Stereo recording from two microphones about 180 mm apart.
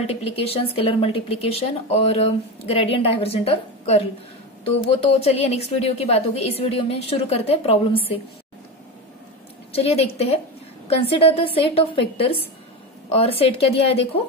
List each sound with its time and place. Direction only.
0.0 s speech: 35° left (ahead or behind)
9.7 s speech: 35° left (ahead or behind)